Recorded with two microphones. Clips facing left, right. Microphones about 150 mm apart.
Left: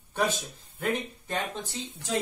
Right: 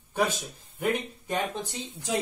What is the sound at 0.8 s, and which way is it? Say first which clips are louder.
Speech: right 2 dB; 10° right (ahead or behind).